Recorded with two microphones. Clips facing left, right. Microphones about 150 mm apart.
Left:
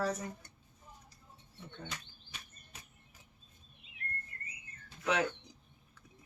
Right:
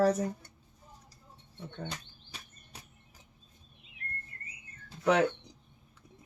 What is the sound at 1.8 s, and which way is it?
Insect, 35° right (ahead or behind).